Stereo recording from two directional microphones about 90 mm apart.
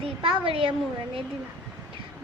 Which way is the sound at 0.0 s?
80° right.